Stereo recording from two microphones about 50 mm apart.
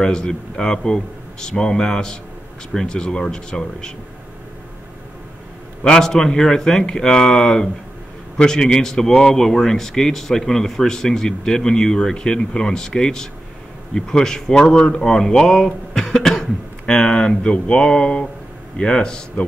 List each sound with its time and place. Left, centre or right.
0.0 s a man's voice: centre
5.9 s a man's voice: centre